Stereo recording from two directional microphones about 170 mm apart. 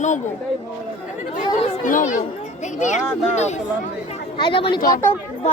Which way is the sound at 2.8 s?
45° left (ahead or behind).